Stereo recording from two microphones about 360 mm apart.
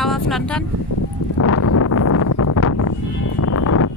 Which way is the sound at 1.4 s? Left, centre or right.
Left.